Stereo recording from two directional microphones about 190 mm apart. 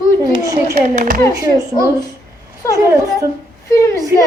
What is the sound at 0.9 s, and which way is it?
Speech, 45° right (ahead or behind).